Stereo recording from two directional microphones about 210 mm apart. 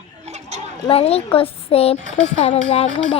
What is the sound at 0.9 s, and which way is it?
Child singing, 30° left (ahead or behind).